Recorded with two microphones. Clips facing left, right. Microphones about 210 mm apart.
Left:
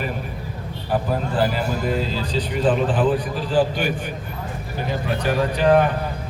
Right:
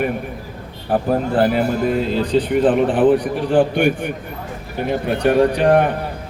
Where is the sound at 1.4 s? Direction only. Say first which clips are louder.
Right 6 dB; 60° right (ahead or behind).